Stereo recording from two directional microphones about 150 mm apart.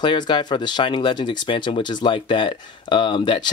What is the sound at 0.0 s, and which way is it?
Speech, 30° left (ahead or behind).